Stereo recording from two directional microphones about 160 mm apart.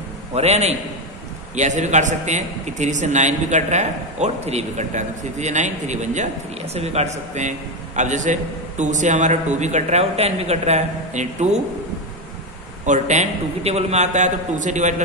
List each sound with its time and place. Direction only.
0.3 s a man's voice: 40° right (ahead or behind)
12.8 s a man's voice: 50° right (ahead or behind)